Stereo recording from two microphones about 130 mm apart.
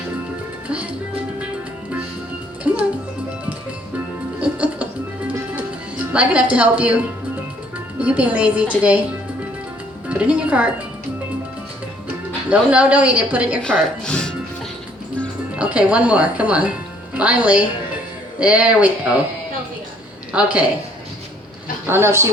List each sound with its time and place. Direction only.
2.7 s music: 10° right (ahead or behind)
4.4 s music: 10° right (ahead or behind)
7.9 s speech: 10° right (ahead or behind)
10.1 s speech: 10° right (ahead or behind)
12.5 s speech: 10° right (ahead or behind)
13.6 s speech: 5° left (ahead or behind)
15.5 s speech: 10° right (ahead or behind)
20.3 s speech: 10° right (ahead or behind)
21.8 s speech: 20° right (ahead or behind)